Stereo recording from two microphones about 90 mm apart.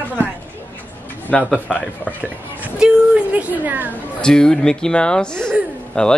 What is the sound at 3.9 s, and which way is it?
Speech, 10° left (ahead or behind).